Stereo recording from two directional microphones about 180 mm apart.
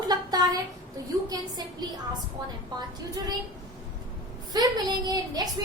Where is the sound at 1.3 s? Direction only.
20° right (ahead or behind).